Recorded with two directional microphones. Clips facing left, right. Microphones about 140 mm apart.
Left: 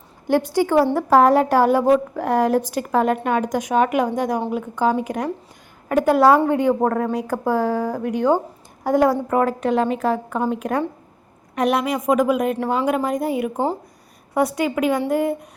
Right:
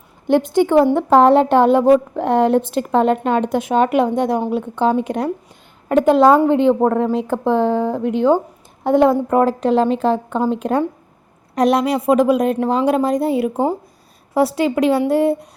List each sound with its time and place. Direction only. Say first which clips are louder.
0.3 s a woman's voice: right 4 dB; 20° right (ahead or behind)